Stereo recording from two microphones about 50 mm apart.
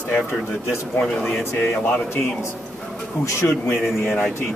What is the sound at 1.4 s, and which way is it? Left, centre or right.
Speech, left.